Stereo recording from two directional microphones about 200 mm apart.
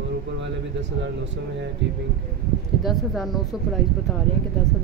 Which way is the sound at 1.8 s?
65° right (ahead or behind).